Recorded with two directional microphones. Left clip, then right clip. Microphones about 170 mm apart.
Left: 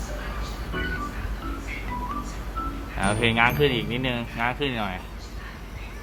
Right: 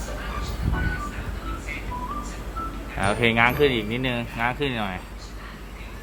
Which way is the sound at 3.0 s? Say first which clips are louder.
Right 1 dB; 10° right (ahead or behind).